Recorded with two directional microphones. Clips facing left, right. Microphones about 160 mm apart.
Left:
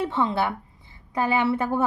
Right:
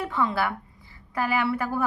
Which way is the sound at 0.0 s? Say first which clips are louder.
Left 2 dB; 25° left (ahead or behind).